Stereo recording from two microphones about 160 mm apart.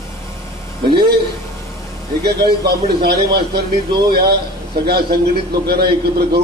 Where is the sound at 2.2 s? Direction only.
80° right.